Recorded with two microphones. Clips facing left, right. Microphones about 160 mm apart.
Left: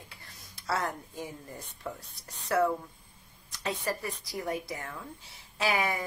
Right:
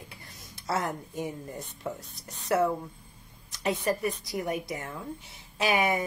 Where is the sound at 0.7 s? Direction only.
20° right (ahead or behind).